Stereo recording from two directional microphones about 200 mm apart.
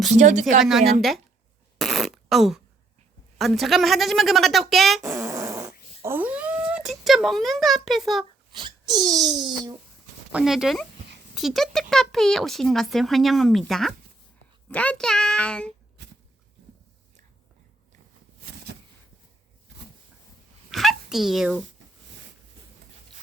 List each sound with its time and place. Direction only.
0.1 s speech: 35° right (ahead or behind)
0.6 s speech: centre (ahead or behind)
1.8 s fart: centre (ahead or behind)
3.3 s speech: centre (ahead or behind)
5.0 s fart: 15° right (ahead or behind)
8.5 s a sound: 20° right (ahead or behind)
10.3 s speech: centre (ahead or behind)
16.0 s a sound: 60° right (ahead or behind)
18.4 s a sound: 55° right (ahead or behind)
20.7 s speech: centre (ahead or behind)